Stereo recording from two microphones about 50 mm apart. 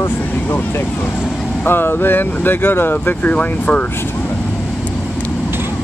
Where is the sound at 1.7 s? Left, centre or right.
Left.